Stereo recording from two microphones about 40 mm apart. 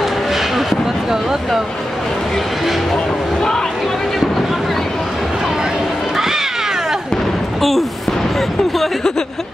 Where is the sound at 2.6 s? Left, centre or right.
Centre.